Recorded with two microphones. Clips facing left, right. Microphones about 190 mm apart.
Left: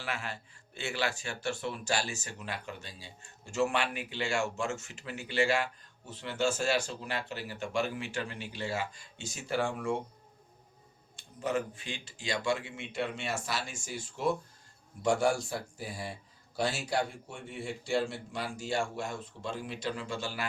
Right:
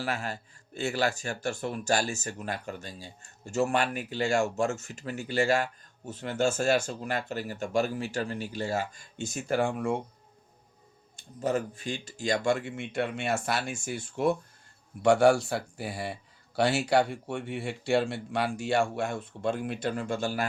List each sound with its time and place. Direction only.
0.0 s speech: 40° right (ahead or behind)
11.4 s speech: 40° right (ahead or behind); by 14.3 s 55° right (ahead or behind)
15.0 s speech: 65° right (ahead or behind); by 20.5 s 45° right (ahead or behind)